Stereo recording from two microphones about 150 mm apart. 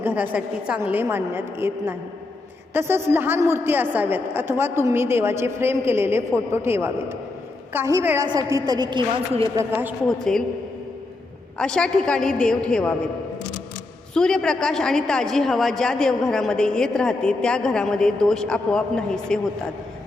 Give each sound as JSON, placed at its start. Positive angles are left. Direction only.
{"t": 0.0, "sound": "a woman's voice", "side_deg": -10}
{"t": 9.6, "sound": "a woman's voice", "side_deg": -15}
{"t": 10.1, "sound": "a woman's voice", "side_deg": 5}
{"t": 11.6, "sound": "a woman's voice", "side_deg": 5}
{"t": 14.1, "sound": "a woman's voice", "side_deg": 5}